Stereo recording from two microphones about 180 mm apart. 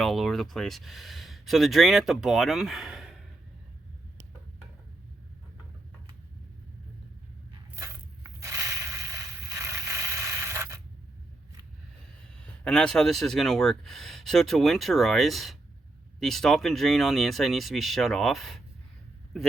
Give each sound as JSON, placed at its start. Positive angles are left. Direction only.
{"t": 0.0, "sound": "speech", "side_deg": 0}
{"t": 8.4, "sound": "crushing", "side_deg": -15}
{"t": 12.6, "sound": "speech", "side_deg": 5}